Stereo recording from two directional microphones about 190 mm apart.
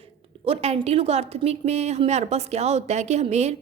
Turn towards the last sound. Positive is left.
turn(degrees=-35)  # may be behind; listen again after turning